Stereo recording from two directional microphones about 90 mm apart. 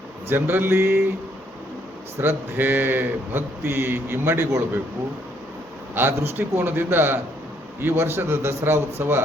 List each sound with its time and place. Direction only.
0.3 s a man's voice: 25° right (ahead or behind)
2.2 s a man's voice: 25° right (ahead or behind)
5.9 s a man's voice: 25° right (ahead or behind)